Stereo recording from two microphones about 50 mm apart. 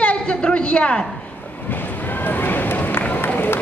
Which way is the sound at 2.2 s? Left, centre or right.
Left.